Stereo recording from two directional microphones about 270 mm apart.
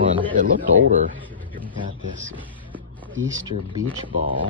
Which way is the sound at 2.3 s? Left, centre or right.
Centre.